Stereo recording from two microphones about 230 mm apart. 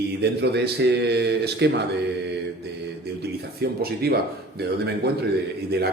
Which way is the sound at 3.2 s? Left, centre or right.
Right.